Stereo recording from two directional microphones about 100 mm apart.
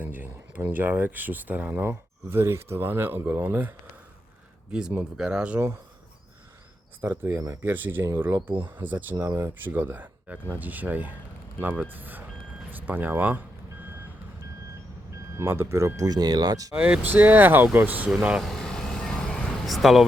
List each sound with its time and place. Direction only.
0.0 s speech: 20° right (ahead or behind)
4.7 s speech: 10° right (ahead or behind)
7.0 s speech: 20° right (ahead or behind)
7.3 s speech: 30° right (ahead or behind)
7.6 s speech: 20° right (ahead or behind)
9.2 s speech: 30° right (ahead or behind)
9.6 s speech: 20° right (ahead or behind)
15.1 s speech: 25° right (ahead or behind)
16.0 s speech: 40° right (ahead or behind)
16.7 s speech: 10° right (ahead or behind)